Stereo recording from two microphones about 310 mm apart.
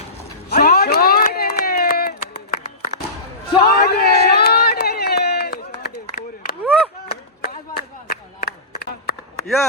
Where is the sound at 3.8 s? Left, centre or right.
Left.